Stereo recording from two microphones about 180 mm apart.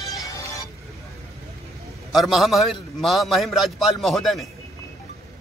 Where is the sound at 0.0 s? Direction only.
20° left (ahead or behind).